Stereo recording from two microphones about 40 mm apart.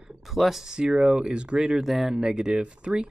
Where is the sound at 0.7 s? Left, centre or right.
Centre.